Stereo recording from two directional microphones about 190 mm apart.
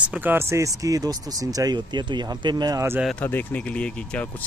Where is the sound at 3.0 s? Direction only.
5° left (ahead or behind).